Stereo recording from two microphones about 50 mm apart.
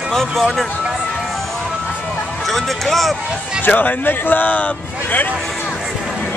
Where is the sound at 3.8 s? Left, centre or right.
Left.